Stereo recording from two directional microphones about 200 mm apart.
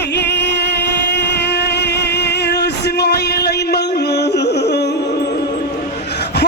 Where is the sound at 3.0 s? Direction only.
55° left (ahead or behind).